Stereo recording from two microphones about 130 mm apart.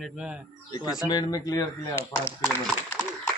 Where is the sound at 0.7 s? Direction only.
30° left (ahead or behind).